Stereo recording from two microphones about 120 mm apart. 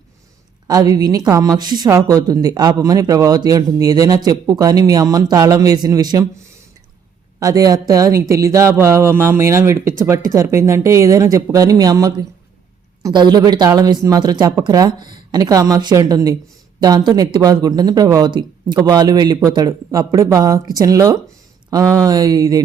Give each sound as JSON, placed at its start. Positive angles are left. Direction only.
{"t": 0.7, "sound": "speech", "side_deg": -30}
{"t": 7.3, "sound": "speech", "side_deg": -30}